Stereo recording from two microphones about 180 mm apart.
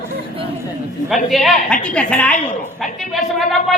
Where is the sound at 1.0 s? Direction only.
Centre (ahead or behind).